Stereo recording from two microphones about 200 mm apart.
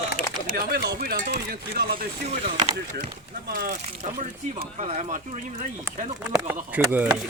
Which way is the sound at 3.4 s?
45° right (ahead or behind).